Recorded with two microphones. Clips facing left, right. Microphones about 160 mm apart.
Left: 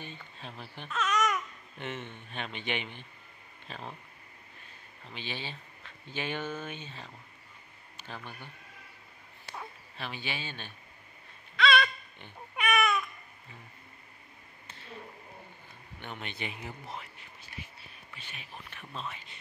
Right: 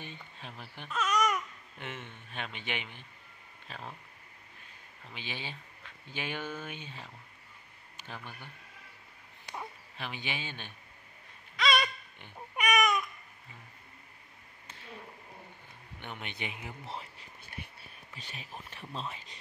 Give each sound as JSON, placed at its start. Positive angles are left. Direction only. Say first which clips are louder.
{"t": 0.0, "sound": "babbling", "louder": "left 1 dB", "side_deg": -10}
{"t": 2.3, "sound": "speech", "louder": "left 3 dB", "side_deg": -5}
{"t": 5.1, "sound": "speech", "louder": "left 2 dB", "side_deg": -10}
{"t": 9.5, "sound": "dog", "louder": "right 1 dB", "side_deg": -15}
{"t": 11.8, "sound": "babbling", "louder": "left 2 dB", "side_deg": -15}
{"t": 16.0, "sound": "speech", "louder": "left 1 dB", "side_deg": -15}
{"t": 16.8, "sound": "a sound", "louder": "right 1 dB", "side_deg": -30}
{"t": 18.1, "sound": "speech", "louder": "right 2 dB", "side_deg": -40}